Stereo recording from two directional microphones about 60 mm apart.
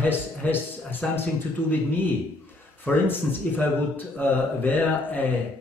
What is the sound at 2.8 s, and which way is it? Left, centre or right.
A man's voice, left.